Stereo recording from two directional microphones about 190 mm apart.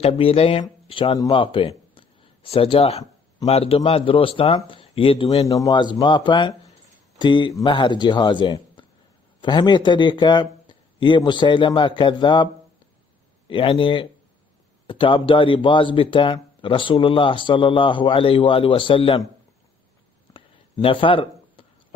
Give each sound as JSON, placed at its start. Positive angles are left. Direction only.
{"t": 0.0, "sound": "speech", "side_deg": 30}
{"t": 13.5, "sound": "speech", "side_deg": 25}
{"t": 20.3, "sound": "a sound", "side_deg": 25}